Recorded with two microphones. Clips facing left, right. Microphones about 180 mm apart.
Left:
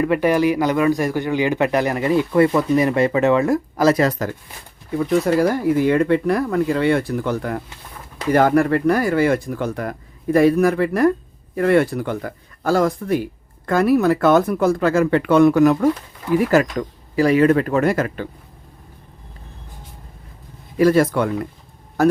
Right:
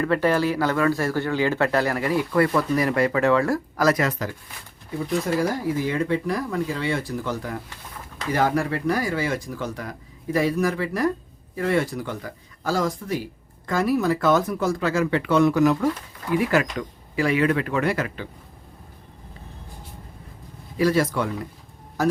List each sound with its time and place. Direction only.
0.0 s speech: 15° left (ahead or behind); by 4.3 s 35° left (ahead or behind)
4.9 s speech: 60° left (ahead or behind)
16.4 s speech: 40° left (ahead or behind)
20.7 s speech: 55° left (ahead or behind)